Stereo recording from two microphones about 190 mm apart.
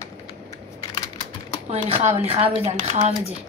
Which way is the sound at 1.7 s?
35° right (ahead or behind).